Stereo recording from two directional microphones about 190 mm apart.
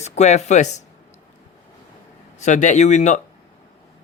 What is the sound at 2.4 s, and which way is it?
Speech, 40° left (ahead or behind).